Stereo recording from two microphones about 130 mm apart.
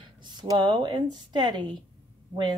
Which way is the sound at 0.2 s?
35° right (ahead or behind).